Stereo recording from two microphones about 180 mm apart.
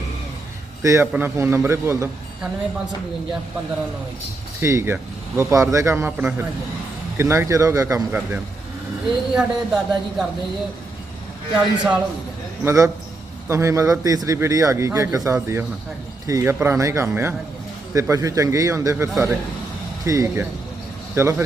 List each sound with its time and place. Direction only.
0.8 s a man's voice: 15° right (ahead or behind)
4.6 s a man's voice: 15° right (ahead or behind)
9.3 s speech: 5° right (ahead or behind)
11.5 s speech: 5° right (ahead or behind)
12.6 s a man's voice: 15° right (ahead or behind)